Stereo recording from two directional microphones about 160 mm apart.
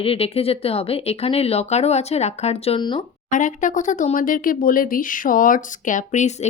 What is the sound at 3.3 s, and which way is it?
Speech, 55° left (ahead or behind).